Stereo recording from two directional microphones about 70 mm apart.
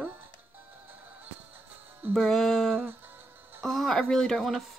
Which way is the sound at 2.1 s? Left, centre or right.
Centre.